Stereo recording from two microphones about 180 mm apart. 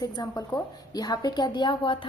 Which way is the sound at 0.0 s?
20° left (ahead or behind).